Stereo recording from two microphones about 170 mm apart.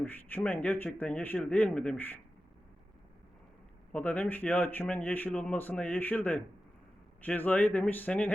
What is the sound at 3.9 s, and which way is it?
Speech, 10° left (ahead or behind).